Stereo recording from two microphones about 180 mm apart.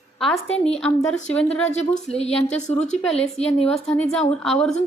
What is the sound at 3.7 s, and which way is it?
A woman's voice, 5° left (ahead or behind).